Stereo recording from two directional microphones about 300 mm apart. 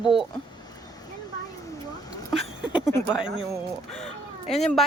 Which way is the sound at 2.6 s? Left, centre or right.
Centre.